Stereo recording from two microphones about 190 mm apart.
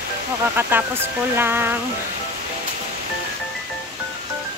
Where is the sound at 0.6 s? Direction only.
10° right (ahead or behind).